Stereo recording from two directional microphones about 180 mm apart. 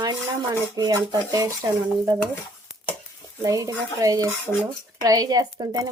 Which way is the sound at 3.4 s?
20° right (ahead or behind).